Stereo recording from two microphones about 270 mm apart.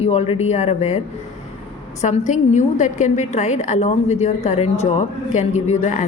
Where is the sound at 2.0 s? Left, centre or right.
Left.